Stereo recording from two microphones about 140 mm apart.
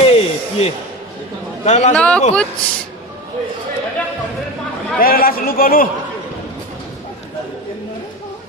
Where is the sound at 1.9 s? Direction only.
5° left (ahead or behind).